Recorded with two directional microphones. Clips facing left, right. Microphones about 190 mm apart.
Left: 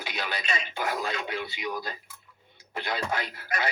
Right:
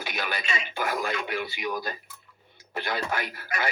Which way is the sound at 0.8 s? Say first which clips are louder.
Right 3 dB; 25° left (ahead or behind).